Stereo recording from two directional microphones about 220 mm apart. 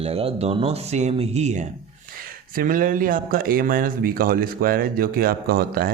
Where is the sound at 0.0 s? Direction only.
25° right (ahead or behind).